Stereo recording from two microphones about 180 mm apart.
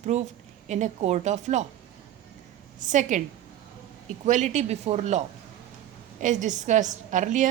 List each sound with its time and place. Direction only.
0.0 s a woman's voice: 40° right (ahead or behind)
2.8 s a woman's voice: 45° right (ahead or behind)
4.3 s a woman's voice: 40° right (ahead or behind)